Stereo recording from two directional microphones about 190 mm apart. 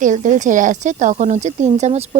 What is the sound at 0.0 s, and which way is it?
Speech, 40° right (ahead or behind).